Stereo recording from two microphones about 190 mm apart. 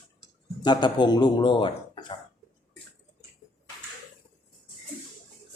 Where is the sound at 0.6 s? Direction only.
25° left (ahead or behind).